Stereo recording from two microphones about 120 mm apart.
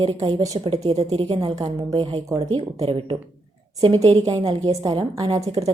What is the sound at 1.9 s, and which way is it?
Speech, 45° right (ahead or behind).